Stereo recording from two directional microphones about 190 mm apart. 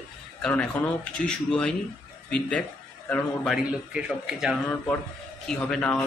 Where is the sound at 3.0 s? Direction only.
5° left (ahead or behind).